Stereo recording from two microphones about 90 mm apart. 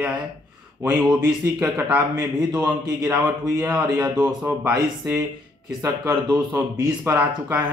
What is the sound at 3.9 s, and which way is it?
Speech, 45° right (ahead or behind).